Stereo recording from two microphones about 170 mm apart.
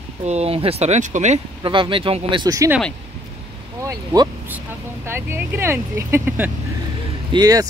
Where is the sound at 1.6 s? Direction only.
30° right (ahead or behind).